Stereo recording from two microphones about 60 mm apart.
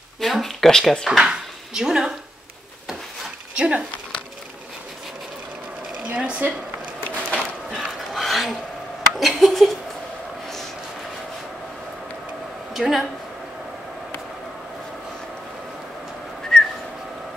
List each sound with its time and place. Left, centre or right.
0.2 s speech: centre
1.0 s speech: centre
3.5 s speech: centre
6.0 s speech: right
7.7 s a sound: centre
9.1 s speech: centre
12.7 s speech: centre
16.5 s whistling: centre